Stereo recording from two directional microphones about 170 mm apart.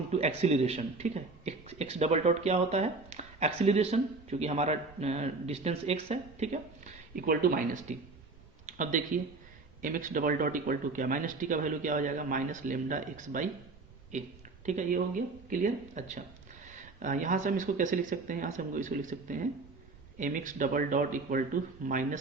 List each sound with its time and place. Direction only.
0.1 s a man's voice: 40° right (ahead or behind)
7.2 s speech: 60° right (ahead or behind)